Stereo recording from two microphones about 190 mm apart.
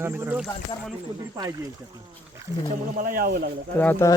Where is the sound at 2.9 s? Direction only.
50° right (ahead or behind).